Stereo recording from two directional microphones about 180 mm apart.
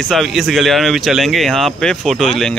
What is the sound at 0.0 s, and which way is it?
A man's voice, centre (ahead or behind).